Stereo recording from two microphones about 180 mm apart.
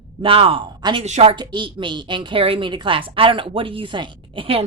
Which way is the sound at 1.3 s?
25° right (ahead or behind).